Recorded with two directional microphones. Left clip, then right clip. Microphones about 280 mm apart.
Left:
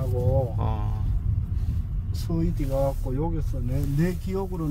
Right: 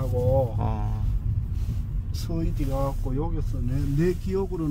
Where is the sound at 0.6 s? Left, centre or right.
Centre.